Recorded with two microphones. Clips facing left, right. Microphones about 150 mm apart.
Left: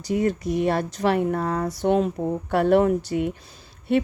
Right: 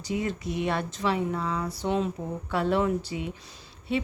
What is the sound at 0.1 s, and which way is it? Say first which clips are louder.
Speech: left 7 dB; 45° left (ahead or behind).